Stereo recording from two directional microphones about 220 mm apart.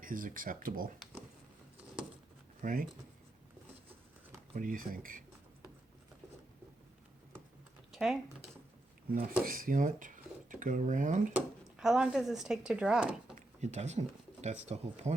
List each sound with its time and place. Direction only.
0.0 s speech: 40° right (ahead or behind)
2.6 s speech: 40° right (ahead or behind)
4.5 s speech: 40° right (ahead or behind)
7.9 s speech: centre (ahead or behind)
9.4 s speech: 40° right (ahead or behind)
11.3 s speech: 5° right (ahead or behind)
13.3 s a sound: 30° right (ahead or behind)
14.4 s speech: 30° right (ahead or behind)